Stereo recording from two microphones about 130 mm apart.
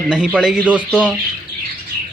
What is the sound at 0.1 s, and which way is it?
Speech, 5° right (ahead or behind).